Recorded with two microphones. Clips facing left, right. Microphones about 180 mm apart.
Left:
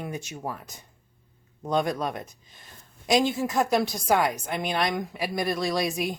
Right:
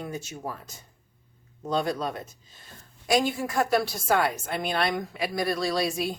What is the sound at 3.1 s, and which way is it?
Speech, 20° left (ahead or behind).